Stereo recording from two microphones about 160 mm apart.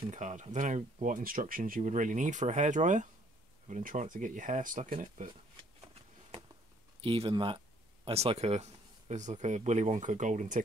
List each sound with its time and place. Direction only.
0.1 s speech: 50° right (ahead or behind)
7.0 s speech: 35° right (ahead or behind); by 10.6 s 50° right (ahead or behind)